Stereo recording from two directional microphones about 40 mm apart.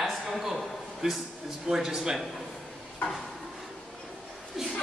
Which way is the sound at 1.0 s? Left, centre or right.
Centre.